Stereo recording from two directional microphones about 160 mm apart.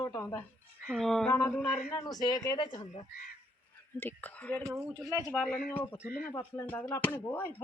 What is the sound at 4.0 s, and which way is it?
Speech, 10° left (ahead or behind).